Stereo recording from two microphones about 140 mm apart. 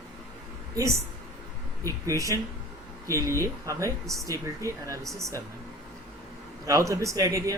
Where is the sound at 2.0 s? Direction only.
20° right (ahead or behind).